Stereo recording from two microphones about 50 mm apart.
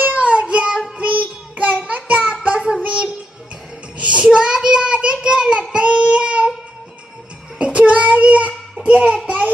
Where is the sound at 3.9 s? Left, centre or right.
Right.